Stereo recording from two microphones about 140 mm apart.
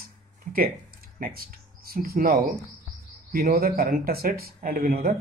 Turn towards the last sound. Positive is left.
turn(degrees=-90)